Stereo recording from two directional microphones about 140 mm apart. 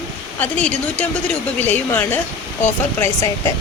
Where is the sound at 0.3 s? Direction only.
10° left (ahead or behind).